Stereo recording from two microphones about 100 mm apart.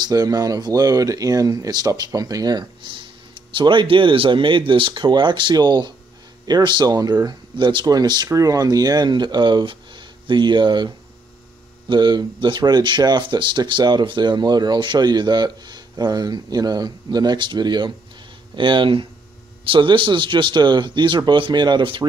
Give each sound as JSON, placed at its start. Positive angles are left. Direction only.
{"t": 0.0, "sound": "speech", "side_deg": -40}
{"t": 3.3, "sound": "speech", "side_deg": -50}
{"t": 6.9, "sound": "speech", "side_deg": -40}
{"t": 11.9, "sound": "speech", "side_deg": -50}